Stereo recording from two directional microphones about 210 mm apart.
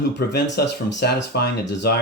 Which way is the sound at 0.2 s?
55° left (ahead or behind).